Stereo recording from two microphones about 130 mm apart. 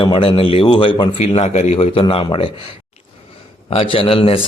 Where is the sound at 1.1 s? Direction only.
55° left (ahead or behind).